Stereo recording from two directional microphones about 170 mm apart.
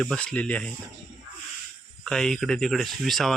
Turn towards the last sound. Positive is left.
turn(degrees=0)  # may be behind; listen again after turning